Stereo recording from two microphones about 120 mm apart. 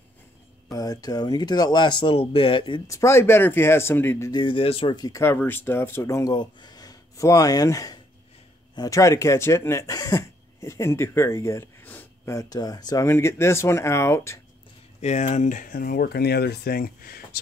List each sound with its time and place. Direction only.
0.7 s speech: 30° left (ahead or behind)
2.9 s speech: 25° left (ahead or behind)
4.3 s speech: 45° left (ahead or behind)
4.9 s speech: 30° left (ahead or behind)
5.2 s speech: 15° left (ahead or behind)
6.3 s speech: 40° left (ahead or behind); by 12.4 s 15° left (ahead or behind)
12.4 s speech: 30° left (ahead or behind)
15.0 s speech: 70° left (ahead or behind)